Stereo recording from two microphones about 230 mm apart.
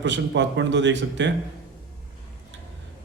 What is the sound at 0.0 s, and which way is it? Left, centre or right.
A man's voice, right.